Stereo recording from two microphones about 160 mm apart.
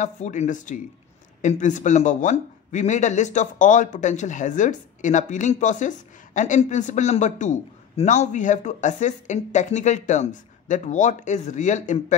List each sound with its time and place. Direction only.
0.0 s speech: 50° left (ahead or behind)